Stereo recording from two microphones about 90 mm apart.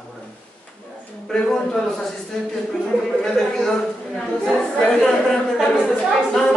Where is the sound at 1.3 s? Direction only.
5° left (ahead or behind).